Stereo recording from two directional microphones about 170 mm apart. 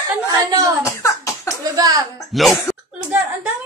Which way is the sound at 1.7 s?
20° right (ahead or behind).